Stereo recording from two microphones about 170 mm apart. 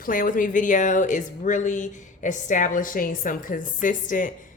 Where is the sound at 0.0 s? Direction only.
55° left (ahead or behind).